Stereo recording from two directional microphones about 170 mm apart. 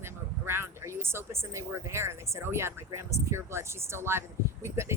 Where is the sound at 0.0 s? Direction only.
15° right (ahead or behind).